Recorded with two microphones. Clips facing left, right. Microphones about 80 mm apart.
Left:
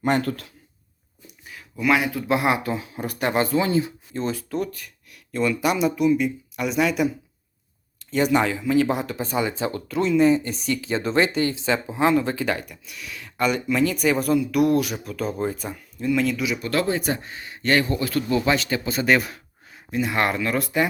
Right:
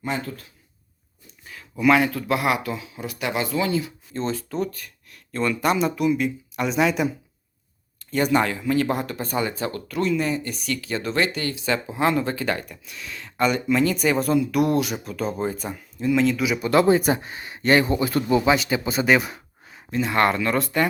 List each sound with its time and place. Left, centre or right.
0.0 s speech: left
1.9 s speech: centre
2.2 s speech: left
4.1 s speech: centre
8.1 s speech: centre
16.6 s speech: right
19.9 s speech: centre